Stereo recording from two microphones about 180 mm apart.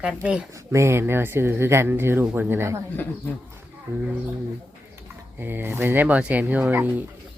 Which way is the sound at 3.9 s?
15° right (ahead or behind).